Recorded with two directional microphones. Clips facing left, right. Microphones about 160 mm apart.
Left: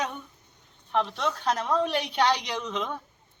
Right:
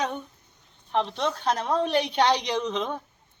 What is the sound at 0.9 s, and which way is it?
A woman's voice, 25° right (ahead or behind).